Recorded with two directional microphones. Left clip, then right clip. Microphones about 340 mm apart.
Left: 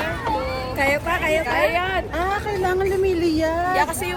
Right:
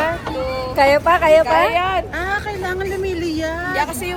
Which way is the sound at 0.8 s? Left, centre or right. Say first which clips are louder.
Right 8 dB; centre.